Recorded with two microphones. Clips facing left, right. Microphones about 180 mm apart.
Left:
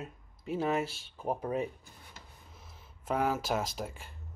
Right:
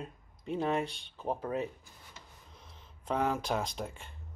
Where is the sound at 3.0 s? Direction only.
5° left (ahead or behind).